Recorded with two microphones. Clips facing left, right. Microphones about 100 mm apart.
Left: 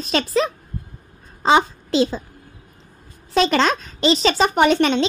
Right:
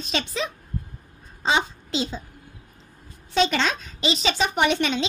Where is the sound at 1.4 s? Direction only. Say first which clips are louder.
Left 7 dB; 50° left (ahead or behind).